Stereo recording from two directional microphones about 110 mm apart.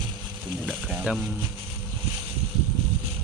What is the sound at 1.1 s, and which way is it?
Speech, 10° right (ahead or behind).